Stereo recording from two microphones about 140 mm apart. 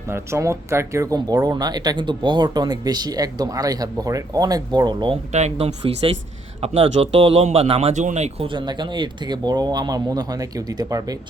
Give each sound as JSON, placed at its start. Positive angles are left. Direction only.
{"t": 0.1, "sound": "speech", "side_deg": -20}
{"t": 5.3, "sound": "speech", "side_deg": -50}
{"t": 8.4, "sound": "speech", "side_deg": -35}